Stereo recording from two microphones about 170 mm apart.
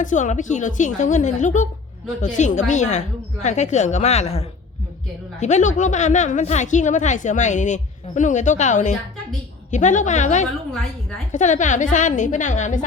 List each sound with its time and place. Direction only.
0.0 s a woman's voice: 50° left (ahead or behind)